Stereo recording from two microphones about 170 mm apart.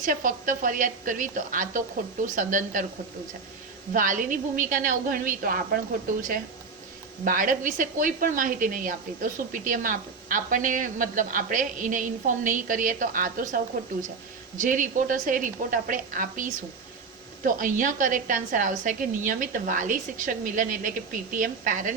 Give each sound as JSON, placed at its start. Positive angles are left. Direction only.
{"t": 0.0, "sound": "a woman's voice", "side_deg": -50}
{"t": 3.9, "sound": "a woman's voice", "side_deg": -50}
{"t": 7.3, "sound": "a woman's voice", "side_deg": -50}
{"t": 14.6, "sound": "a woman's voice", "side_deg": -50}